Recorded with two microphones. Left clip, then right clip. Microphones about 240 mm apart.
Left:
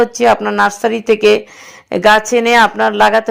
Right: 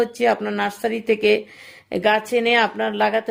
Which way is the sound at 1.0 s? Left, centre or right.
Centre.